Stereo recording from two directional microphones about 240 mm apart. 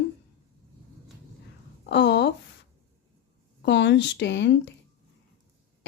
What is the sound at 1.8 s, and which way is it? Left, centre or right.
Speech, left.